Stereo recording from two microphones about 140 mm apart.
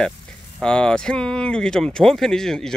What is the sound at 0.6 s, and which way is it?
Speech, 5° left (ahead or behind).